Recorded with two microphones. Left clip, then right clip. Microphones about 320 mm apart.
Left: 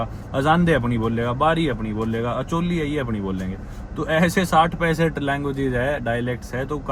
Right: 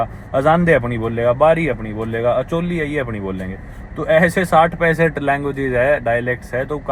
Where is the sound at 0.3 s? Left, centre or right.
Right.